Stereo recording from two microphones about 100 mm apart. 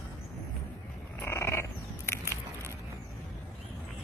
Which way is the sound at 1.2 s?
25° left (ahead or behind).